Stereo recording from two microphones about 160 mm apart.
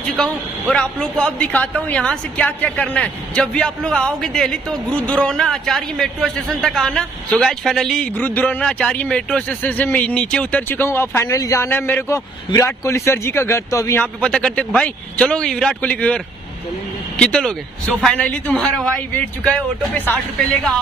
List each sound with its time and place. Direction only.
0.1 s speech: 5° left (ahead or behind)
14.0 s speech: 5° left (ahead or behind)
17.2 s a woman's voice: 5° left (ahead or behind)